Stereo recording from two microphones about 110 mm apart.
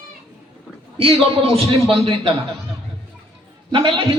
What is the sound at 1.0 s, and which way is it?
A man's voice, 55° right (ahead or behind).